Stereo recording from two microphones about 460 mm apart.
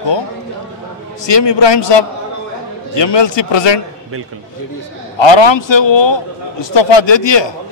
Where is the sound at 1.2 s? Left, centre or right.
Left.